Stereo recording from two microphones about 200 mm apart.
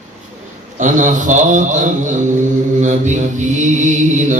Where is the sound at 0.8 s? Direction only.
40° right (ahead or behind).